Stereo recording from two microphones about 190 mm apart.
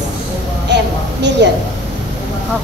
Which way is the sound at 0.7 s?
65° right (ahead or behind).